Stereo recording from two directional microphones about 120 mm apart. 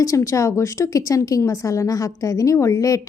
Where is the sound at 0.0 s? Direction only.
25° left (ahead or behind).